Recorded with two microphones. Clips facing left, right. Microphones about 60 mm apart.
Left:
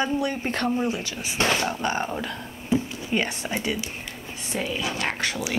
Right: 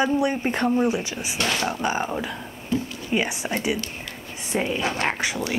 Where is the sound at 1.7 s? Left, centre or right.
Centre.